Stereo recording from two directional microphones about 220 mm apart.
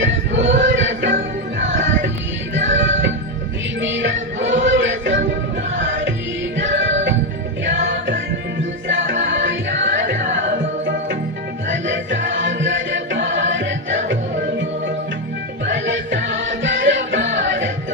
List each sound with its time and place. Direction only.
0.0 s choir: 55° right (ahead or behind)
1.5 s music: 55° right (ahead or behind)
11.7 s music: 55° right (ahead or behind)
15.6 s music: 55° right (ahead or behind)